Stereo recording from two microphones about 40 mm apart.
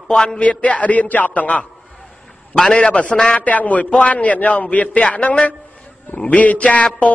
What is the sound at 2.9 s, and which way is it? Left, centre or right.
A man's voice, left.